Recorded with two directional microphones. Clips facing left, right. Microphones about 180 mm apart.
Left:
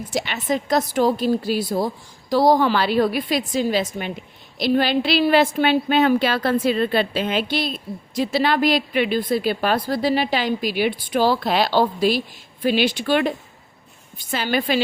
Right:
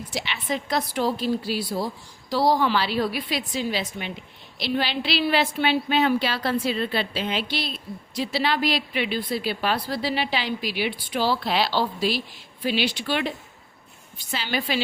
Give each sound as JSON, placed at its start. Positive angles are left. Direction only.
{"t": 0.1, "sound": "a woman's voice", "side_deg": 45}